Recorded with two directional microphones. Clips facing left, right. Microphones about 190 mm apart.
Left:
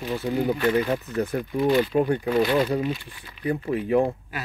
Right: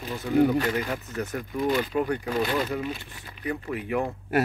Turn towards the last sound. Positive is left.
turn(degrees=30)  # may be behind; listen again after turning